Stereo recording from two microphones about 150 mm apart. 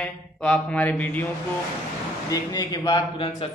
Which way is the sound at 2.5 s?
25° left (ahead or behind).